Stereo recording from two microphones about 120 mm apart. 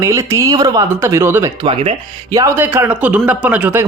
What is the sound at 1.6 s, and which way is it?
Speech, 45° right (ahead or behind).